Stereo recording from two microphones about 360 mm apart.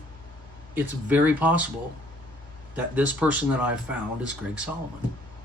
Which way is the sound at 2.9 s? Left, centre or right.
Centre.